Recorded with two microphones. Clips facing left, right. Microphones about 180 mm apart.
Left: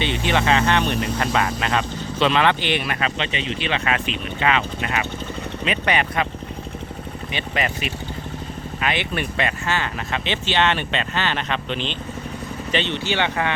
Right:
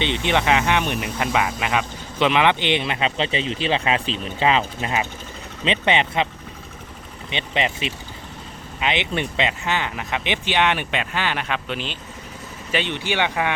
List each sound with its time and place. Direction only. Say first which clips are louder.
0.0 s speech: even; 20° right (ahead or behind)
7.3 s speech: right 1 dB; 25° right (ahead or behind)